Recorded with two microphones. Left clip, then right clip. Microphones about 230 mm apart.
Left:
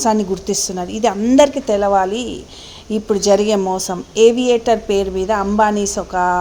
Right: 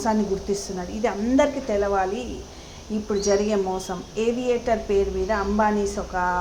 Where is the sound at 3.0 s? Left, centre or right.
Left.